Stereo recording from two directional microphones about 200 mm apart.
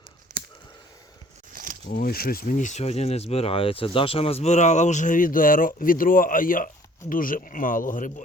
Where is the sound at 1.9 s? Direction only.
45° left (ahead or behind).